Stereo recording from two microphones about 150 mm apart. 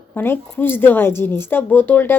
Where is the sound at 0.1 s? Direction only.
15° left (ahead or behind).